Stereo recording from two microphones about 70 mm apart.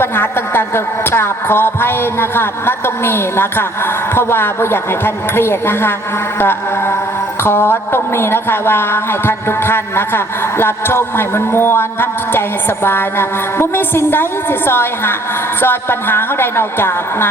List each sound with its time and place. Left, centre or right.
0.0 s a woman's voice: left
6.4 s a sound: left
7.4 s a woman's voice: left